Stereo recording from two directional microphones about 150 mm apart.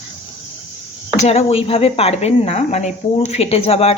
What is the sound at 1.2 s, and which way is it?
Speech, 45° left (ahead or behind).